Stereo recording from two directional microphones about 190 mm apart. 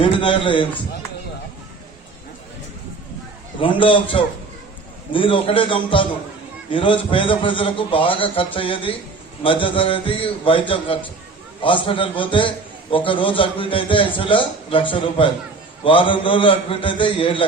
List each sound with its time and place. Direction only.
0.0 s a man's voice: 25° left (ahead or behind)
3.6 s a man's voice: 25° left (ahead or behind)